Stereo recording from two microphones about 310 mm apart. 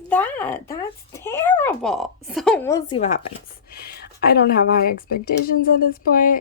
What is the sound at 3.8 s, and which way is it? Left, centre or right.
Speech, left.